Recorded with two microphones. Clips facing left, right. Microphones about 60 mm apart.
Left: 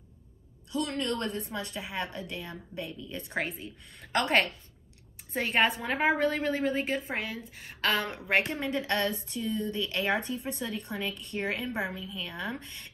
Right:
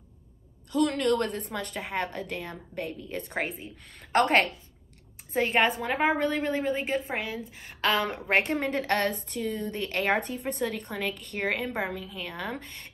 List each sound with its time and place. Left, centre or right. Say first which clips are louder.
0.8 s a woman's voice: right 8 dB; right
5.9 s a woman's voice: right 1 dB; centre
6.4 s a woman's voice: right 1 dB; right
11.9 s a woman's voice: right 3 dB; right
12.2 s a woman's voice: left 1 dB; right